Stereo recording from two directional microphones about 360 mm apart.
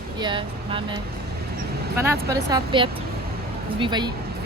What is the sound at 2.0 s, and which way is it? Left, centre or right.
Speech, centre.